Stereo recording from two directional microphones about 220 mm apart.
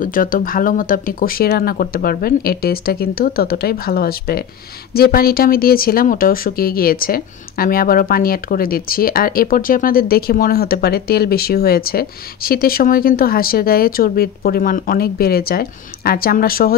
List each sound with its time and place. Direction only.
0.0 s speech: 40° left (ahead or behind)